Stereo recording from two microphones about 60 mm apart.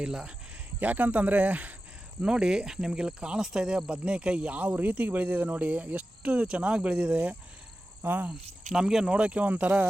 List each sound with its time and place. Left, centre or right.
0.0 s speech: centre
0.8 s speech: right
2.2 s speech: centre
8.0 s cricket: right
8.3 s speech: centre
9.1 s speech: right